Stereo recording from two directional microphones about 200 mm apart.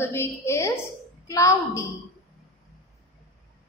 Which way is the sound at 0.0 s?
10° left (ahead or behind).